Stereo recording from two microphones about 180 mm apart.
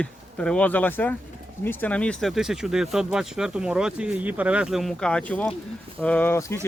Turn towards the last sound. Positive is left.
turn(degrees=15)  # may be behind; listen again after turning